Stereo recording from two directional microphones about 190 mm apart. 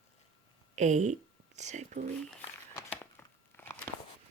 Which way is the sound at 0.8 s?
40° right (ahead or behind).